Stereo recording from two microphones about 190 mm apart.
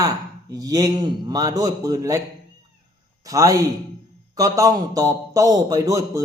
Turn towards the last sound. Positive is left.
turn(degrees=-15)  # may be behind; listen again after turning